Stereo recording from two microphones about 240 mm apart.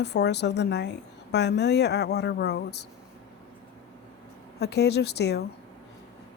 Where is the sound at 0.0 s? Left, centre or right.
Left.